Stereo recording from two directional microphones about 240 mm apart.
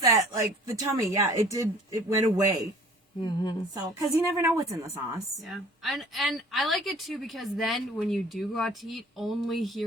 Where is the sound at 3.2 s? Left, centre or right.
Centre.